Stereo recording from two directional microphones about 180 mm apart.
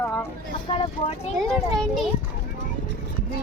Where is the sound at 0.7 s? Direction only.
30° left (ahead or behind).